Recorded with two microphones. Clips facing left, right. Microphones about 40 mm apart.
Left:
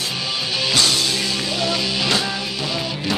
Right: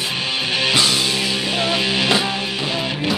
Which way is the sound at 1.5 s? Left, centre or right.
Right.